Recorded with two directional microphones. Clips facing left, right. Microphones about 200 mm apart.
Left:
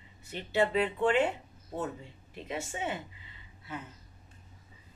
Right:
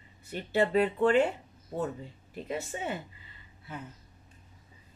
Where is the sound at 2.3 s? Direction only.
40° right (ahead or behind).